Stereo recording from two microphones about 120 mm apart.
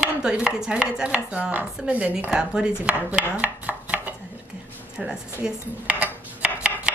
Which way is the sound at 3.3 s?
10° right (ahead or behind).